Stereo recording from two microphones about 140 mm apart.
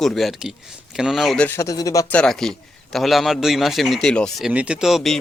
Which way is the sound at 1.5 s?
20° left (ahead or behind).